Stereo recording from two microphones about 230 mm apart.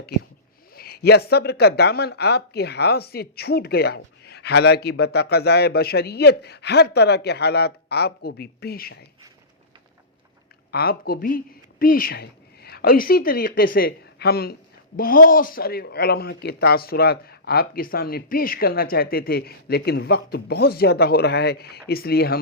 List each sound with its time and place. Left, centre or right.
0.8 s speech: left
10.7 s speech: left